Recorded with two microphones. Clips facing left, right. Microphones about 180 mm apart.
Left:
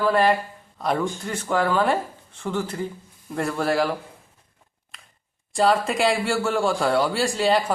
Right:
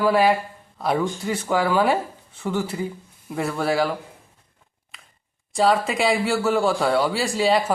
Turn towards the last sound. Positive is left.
turn(degrees=0)  # may be behind; listen again after turning